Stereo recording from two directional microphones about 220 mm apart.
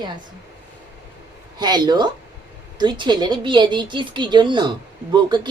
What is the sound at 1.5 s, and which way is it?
A woman's voice, 20° right (ahead or behind).